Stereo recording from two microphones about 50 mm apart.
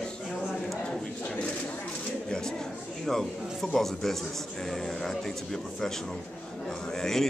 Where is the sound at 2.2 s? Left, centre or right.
Centre.